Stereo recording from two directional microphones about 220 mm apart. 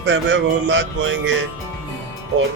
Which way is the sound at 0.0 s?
55° right (ahead or behind).